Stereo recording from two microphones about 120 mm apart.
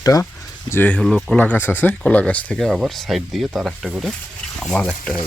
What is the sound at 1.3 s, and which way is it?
Speech, 15° left (ahead or behind).